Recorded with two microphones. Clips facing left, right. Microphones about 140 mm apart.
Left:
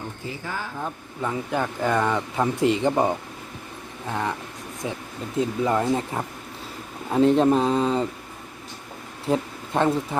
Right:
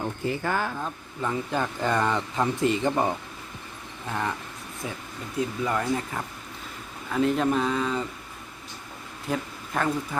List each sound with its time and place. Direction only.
0.3 s speech: 60° right (ahead or behind)
0.8 s speech: 10° left (ahead or behind)
4.1 s speech: 15° left (ahead or behind)
5.4 s speech: 25° left (ahead or behind)
9.2 s speech: 30° left (ahead or behind)